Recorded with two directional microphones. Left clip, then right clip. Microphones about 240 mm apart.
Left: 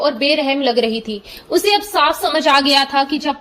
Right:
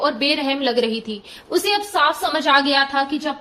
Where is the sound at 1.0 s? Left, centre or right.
Centre.